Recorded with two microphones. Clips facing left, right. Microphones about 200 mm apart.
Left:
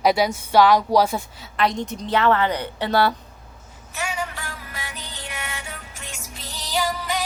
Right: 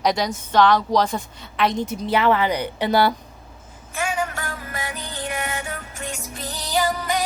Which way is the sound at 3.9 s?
50° right (ahead or behind).